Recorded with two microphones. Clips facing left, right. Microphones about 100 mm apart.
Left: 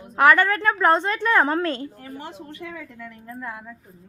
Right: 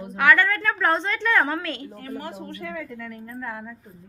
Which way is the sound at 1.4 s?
40° left (ahead or behind).